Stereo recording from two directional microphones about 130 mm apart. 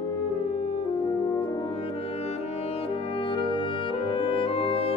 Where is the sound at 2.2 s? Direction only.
50° left (ahead or behind).